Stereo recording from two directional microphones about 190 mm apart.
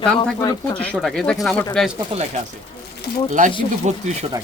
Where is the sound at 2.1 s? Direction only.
30° right (ahead or behind).